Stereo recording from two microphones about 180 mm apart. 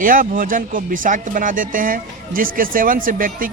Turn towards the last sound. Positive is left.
turn(degrees=-50)  # may be behind; listen again after turning